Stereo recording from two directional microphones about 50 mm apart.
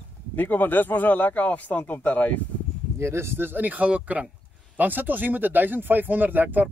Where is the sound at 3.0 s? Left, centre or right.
Right.